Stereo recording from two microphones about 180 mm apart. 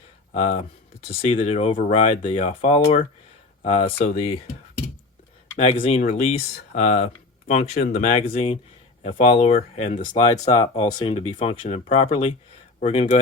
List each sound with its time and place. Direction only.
0.3 s speech: 35° left (ahead or behind)
5.5 s speech: 30° left (ahead or behind)
10.1 s speech: 25° left (ahead or behind)